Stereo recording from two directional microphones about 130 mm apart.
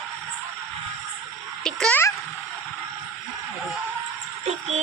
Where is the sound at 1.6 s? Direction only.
5° left (ahead or behind).